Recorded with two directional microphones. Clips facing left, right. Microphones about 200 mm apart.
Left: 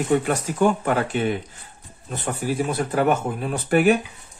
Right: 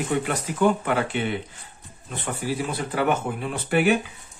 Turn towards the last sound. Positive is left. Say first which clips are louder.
# left 3 dB
turn(degrees=45)  # may be behind; listen again after turning